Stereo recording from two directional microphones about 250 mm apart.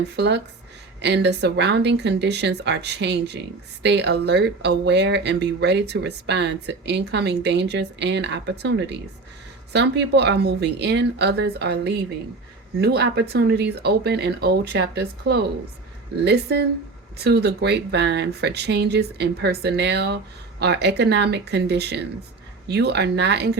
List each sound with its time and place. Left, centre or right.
0.2 s speech: right